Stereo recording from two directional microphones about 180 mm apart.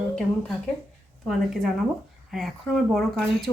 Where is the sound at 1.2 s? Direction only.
Centre (ahead or behind).